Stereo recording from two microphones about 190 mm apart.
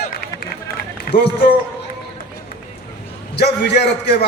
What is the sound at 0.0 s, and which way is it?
Run, 55° left (ahead or behind).